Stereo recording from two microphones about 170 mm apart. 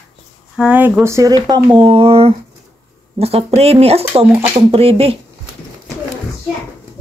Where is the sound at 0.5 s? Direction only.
5° right (ahead or behind); by 5.2 s 35° right (ahead or behind).